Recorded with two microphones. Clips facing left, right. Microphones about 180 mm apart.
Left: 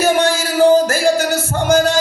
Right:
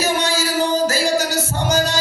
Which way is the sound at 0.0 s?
55° left (ahead or behind).